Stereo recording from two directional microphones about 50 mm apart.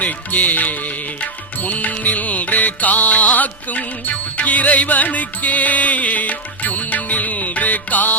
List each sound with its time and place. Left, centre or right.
0.0 s music: left